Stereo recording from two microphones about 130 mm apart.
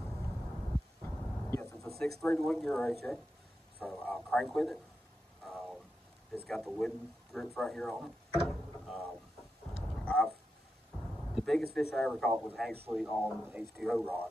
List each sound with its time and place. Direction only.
1.0 s vehicle: 20° left (ahead or behind)
2.0 s speech: 10° left (ahead or behind)
5.4 s a sound: centre (ahead or behind)
6.5 s speech: centre (ahead or behind)
10.0 s a sound: 10° left (ahead or behind)
11.3 s speech: centre (ahead or behind)
14.0 s speech: 10° left (ahead or behind)